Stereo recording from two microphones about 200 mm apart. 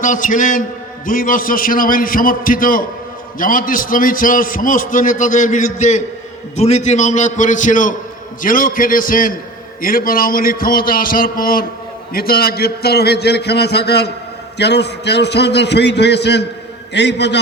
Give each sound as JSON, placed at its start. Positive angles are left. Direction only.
{"t": 0.0, "sound": "a man's voice", "side_deg": 40}